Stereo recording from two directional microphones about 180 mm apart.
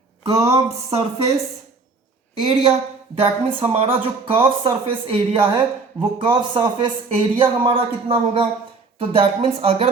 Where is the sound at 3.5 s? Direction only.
30° right (ahead or behind).